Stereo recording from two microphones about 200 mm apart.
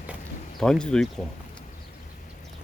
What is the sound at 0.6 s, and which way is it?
Speech, 5° left (ahead or behind).